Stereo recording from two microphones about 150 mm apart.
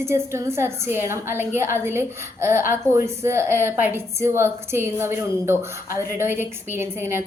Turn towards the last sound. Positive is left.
turn(degrees=-15)  # may be behind; listen again after turning